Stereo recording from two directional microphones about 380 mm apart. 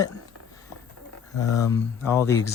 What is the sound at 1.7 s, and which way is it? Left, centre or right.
Speech, centre.